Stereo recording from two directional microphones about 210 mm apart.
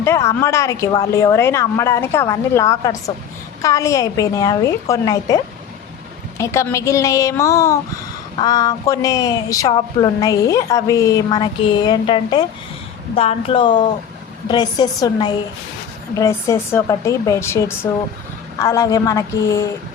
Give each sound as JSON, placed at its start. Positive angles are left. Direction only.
{"t": 0.0, "sound": "a woman's voice", "side_deg": 15}